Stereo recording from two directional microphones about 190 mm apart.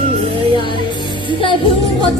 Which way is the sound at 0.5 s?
25° left (ahead or behind).